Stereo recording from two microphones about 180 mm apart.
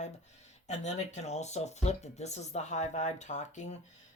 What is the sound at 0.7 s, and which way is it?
Speech, 40° left (ahead or behind).